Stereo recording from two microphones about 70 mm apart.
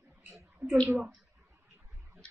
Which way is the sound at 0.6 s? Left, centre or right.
Right.